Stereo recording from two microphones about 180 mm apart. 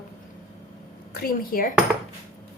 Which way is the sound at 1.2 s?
55° left (ahead or behind).